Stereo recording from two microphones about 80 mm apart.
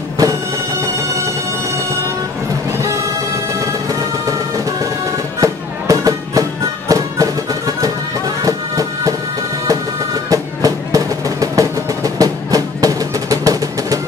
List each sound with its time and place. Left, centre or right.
3.6 s music: right